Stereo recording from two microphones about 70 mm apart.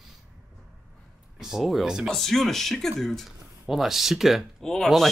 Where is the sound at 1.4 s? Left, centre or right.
Centre.